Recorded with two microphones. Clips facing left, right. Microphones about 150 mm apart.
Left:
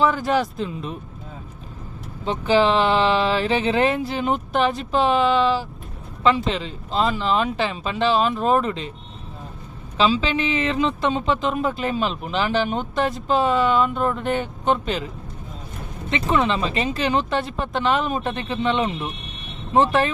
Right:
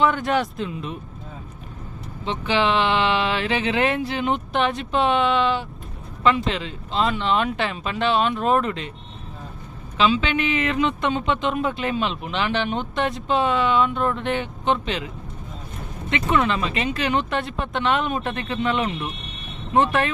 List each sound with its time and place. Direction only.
0.0 s speech: centre (ahead or behind)
2.2 s speech: 40° left (ahead or behind)
3.8 s speech: centre (ahead or behind)
10.0 s speech: 35° left (ahead or behind)
11.3 s speech: centre (ahead or behind)
16.2 s speech: centre (ahead or behind)
16.5 s speech: 30° left (ahead or behind)
17.3 s speech: centre (ahead or behind)
18.3 s speech: 25° left (ahead or behind)